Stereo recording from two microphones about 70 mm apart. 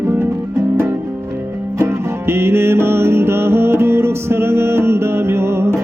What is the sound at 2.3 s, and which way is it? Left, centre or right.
Music, right.